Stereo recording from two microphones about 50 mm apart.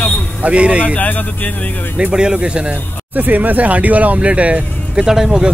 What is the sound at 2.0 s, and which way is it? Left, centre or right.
Speech, centre.